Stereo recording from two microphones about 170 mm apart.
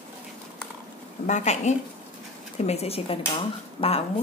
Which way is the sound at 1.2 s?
45° left (ahead or behind).